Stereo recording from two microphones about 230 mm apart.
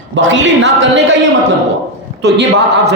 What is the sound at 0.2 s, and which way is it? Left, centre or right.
Speech, right.